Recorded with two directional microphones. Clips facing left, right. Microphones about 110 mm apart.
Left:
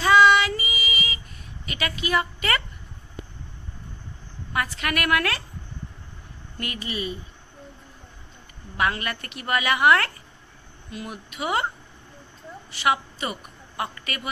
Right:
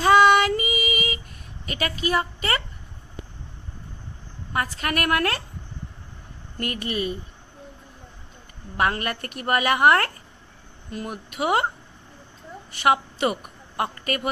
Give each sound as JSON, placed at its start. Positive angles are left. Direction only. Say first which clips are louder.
{"t": 0.0, "sound": "female singing", "louder": "right 1 dB", "side_deg": -50}
{"t": 1.7, "sound": "a woman's voice", "louder": "right 1 dB", "side_deg": -40}
{"t": 4.5, "sound": "a woman's voice", "louder": "right 1 dB", "side_deg": -40}
{"t": 6.6, "sound": "a woman's voice", "louder": "right 4 dB", "side_deg": -50}
{"t": 8.7, "sound": "a woman's voice", "louder": "right 2 dB", "side_deg": -45}
{"t": 12.7, "sound": "a woman's voice", "louder": "right 3 dB", "side_deg": -55}